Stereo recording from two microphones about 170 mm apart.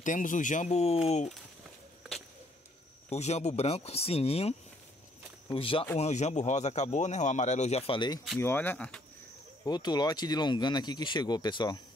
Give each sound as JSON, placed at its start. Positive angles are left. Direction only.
{"t": 0.0, "sound": "speech", "side_deg": 50}
{"t": 3.1, "sound": "speech", "side_deg": 40}
{"t": 8.4, "sound": "speech", "side_deg": 10}
{"t": 9.7, "sound": "speech", "side_deg": 25}